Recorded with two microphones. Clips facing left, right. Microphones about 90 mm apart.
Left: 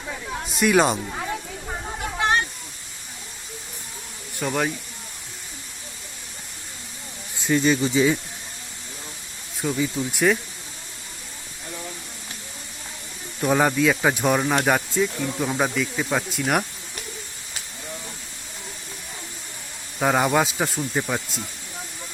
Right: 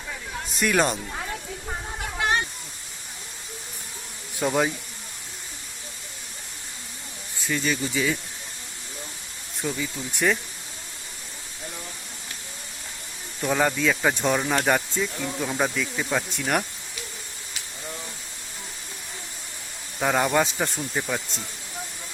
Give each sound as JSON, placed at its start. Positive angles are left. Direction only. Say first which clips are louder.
{"t": 0.6, "sound": "speech", "louder": "left 4 dB", "side_deg": 5}
{"t": 2.1, "sound": "snake", "louder": "left 3 dB", "side_deg": 20}
{"t": 4.4, "sound": "speech", "louder": "right 1 dB", "side_deg": -10}
{"t": 7.4, "sound": "speech", "louder": "left 6 dB", "side_deg": 30}
{"t": 9.6, "sound": "speech", "louder": "left 5 dB", "side_deg": 5}
{"t": 13.4, "sound": "speech", "louder": "left 3 dB", "side_deg": 15}
{"t": 20.0, "sound": "speech", "louder": "left 2 dB", "side_deg": 10}